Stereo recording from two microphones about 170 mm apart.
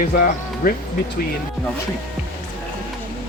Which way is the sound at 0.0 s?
55° left (ahead or behind).